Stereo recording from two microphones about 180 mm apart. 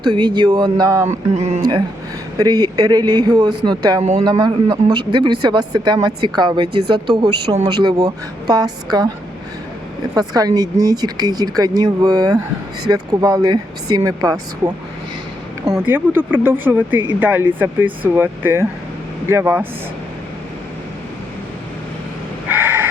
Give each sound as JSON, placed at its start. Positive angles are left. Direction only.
{"t": 0.0, "sound": "speech", "side_deg": -25}
{"t": 1.0, "sound": "a sound", "side_deg": -40}
{"t": 2.4, "sound": "speech", "side_deg": -20}
{"t": 10.2, "sound": "speech", "side_deg": -20}
{"t": 15.7, "sound": "speech", "side_deg": -10}
{"t": 22.4, "sound": "vehicle", "side_deg": -10}